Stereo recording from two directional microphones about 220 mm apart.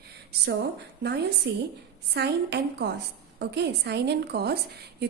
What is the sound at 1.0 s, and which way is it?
A woman's voice, 50° right (ahead or behind).